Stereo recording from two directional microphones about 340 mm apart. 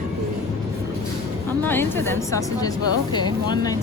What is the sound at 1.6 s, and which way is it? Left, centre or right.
Speech, centre.